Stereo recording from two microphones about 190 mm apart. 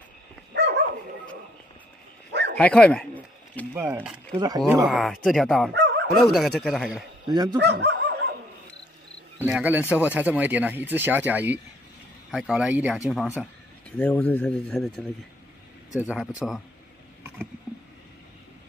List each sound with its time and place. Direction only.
0.6 s bow-wow: 65° right (ahead or behind)
2.5 s speech: 5° left (ahead or behind)
3.7 s speech: 10° right (ahead or behind)
4.4 s speech: 20° right (ahead or behind)
4.8 s speech: centre (ahead or behind)
5.7 s fowl: 65° right (ahead or behind)
6.1 s speech: centre (ahead or behind)
7.5 s a sound: 60° right (ahead or behind)
9.5 s speech: 5° right (ahead or behind)